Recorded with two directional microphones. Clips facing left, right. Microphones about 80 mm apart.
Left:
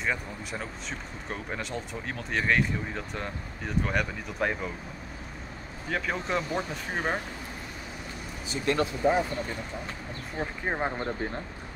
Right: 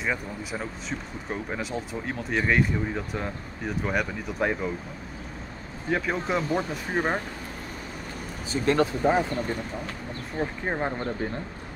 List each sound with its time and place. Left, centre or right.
0.0 s speech: centre
5.9 s speech: centre
6.5 s speech: right
8.5 s speech: right
10.4 s speech: centre